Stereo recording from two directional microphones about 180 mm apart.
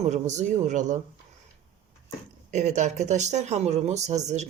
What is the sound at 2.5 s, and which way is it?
Speech, 40° right (ahead or behind).